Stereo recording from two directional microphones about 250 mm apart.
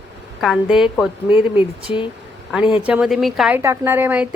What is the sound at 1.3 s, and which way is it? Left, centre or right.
Speech, left.